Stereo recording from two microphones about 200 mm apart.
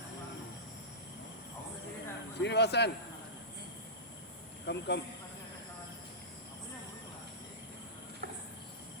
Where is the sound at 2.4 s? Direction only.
55° left (ahead or behind).